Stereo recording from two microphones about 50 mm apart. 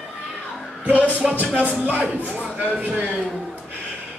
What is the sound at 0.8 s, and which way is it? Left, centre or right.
A man's voice, right.